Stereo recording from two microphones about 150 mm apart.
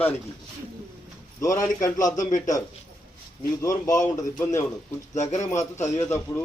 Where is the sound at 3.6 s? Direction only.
20° left (ahead or behind).